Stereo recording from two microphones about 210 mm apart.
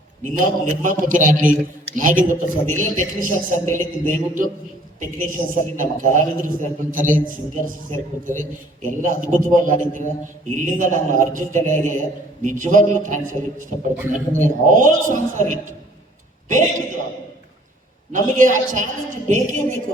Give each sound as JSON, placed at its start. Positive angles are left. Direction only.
{"t": 0.2, "sound": "a man's voice", "side_deg": -40}
{"t": 9.0, "sound": "a man's voice", "side_deg": -40}
{"t": 18.1, "sound": "a man's voice", "side_deg": -35}